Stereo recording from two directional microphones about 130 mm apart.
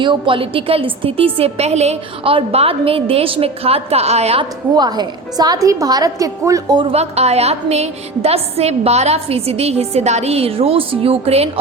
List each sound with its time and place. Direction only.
0.0 s a woman's voice: 40° right (ahead or behind)
4.7 s a woman's voice: 30° right (ahead or behind)
6.7 s a woman's voice: 50° right (ahead or behind)